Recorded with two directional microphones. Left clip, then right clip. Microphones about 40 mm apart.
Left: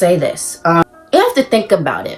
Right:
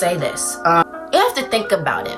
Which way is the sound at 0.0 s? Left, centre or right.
Right.